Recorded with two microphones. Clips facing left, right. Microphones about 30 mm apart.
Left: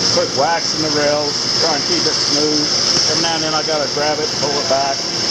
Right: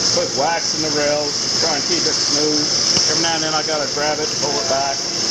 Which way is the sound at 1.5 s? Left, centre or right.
Left.